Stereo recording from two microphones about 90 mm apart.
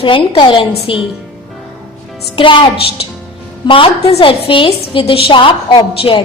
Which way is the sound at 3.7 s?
85° left.